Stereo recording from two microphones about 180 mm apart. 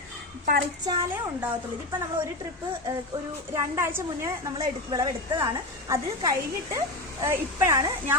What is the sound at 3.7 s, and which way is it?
A woman's voice, 15° right (ahead or behind).